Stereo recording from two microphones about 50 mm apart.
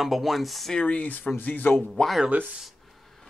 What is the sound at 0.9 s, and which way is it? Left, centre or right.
Speech, left.